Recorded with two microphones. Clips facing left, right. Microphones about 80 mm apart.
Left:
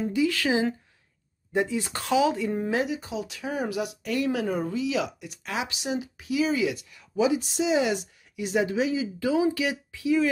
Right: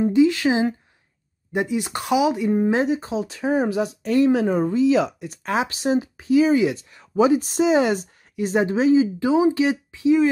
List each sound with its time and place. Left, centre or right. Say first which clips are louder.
0.0 s speech: right 8 dB; right